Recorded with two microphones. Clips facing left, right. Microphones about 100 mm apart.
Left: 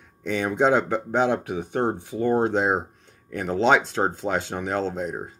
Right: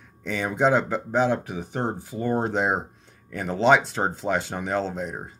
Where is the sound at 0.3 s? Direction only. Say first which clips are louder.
Left 1 dB; centre (ahead or behind).